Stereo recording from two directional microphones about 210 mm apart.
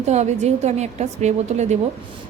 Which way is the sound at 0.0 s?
30° right (ahead or behind).